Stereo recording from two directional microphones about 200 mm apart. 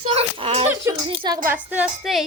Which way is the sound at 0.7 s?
15° right (ahead or behind).